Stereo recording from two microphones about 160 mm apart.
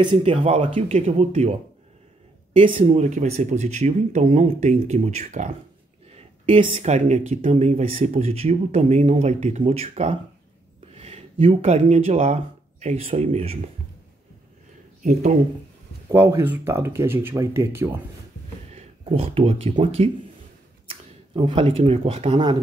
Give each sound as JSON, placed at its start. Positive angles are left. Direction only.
{"t": 0.0, "sound": "speech", "side_deg": -30}
{"t": 6.1, "sound": "speech", "side_deg": -35}
{"t": 16.1, "sound": "speech", "side_deg": -15}
{"t": 18.7, "sound": "a sound", "side_deg": -40}
{"t": 19.7, "sound": "speech", "side_deg": -40}